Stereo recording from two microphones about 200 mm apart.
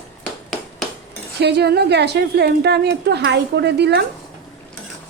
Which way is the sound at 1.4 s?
55° right (ahead or behind).